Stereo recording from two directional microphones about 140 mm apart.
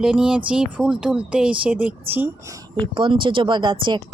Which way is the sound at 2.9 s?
35° right (ahead or behind).